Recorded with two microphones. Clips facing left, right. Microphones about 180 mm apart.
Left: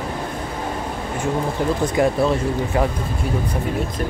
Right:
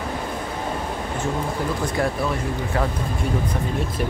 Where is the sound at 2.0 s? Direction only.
15° left (ahead or behind).